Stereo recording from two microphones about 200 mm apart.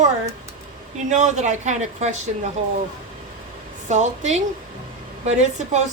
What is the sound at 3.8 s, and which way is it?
Speech, 35° right (ahead or behind).